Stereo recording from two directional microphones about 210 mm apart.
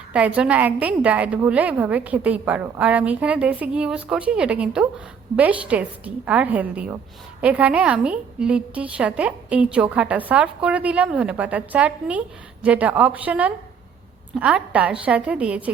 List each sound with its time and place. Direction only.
0.1 s a woman's voice: 5° right (ahead or behind)